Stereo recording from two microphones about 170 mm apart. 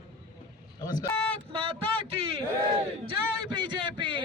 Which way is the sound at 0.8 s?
20° left (ahead or behind).